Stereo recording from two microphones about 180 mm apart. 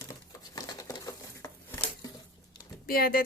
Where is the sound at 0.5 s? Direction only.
20° left (ahead or behind).